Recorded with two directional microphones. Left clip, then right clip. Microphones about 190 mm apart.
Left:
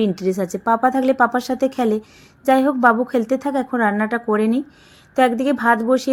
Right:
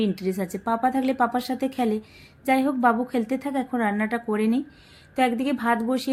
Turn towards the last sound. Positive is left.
turn(degrees=20)  # may be behind; listen again after turning